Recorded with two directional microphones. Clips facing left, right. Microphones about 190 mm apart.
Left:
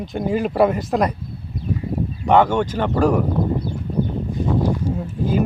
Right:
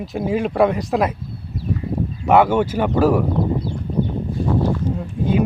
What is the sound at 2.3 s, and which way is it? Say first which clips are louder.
Speech: right 1 dB; 10° right (ahead or behind).